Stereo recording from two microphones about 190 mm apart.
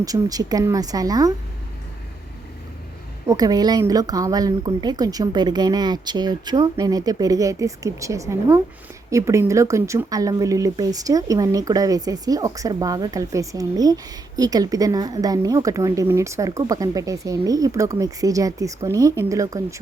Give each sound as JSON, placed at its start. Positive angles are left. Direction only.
{"t": 0.0, "sound": "speech", "side_deg": -20}
{"t": 3.2, "sound": "speech", "side_deg": -20}